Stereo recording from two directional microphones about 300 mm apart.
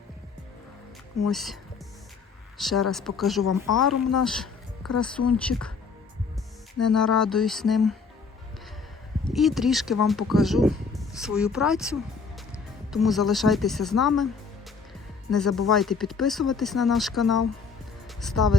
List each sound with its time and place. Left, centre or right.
1.3 s speech: centre
2.6 s speech: centre
6.9 s speech: centre
9.3 s speech: centre
15.3 s speech: centre
18.4 s speech: left